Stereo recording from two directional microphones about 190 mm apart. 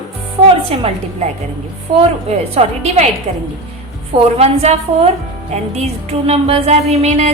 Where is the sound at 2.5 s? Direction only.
35° right (ahead or behind).